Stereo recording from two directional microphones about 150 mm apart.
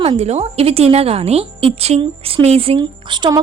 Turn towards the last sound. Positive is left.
turn(degrees=-30)  # may be behind; listen again after turning